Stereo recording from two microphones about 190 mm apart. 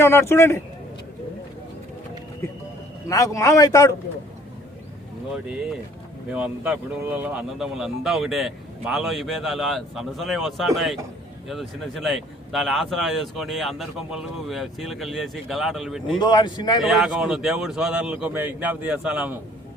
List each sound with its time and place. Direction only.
0.0 s a man's voice: 15° left (ahead or behind)
3.1 s a man's voice: 15° left (ahead or behind)
5.3 s speech: 5° right (ahead or behind)
16.1 s speech: 25° left (ahead or behind)
16.8 s speech: centre (ahead or behind)